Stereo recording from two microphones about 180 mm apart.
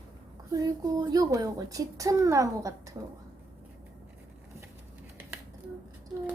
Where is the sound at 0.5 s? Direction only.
20° right (ahead or behind).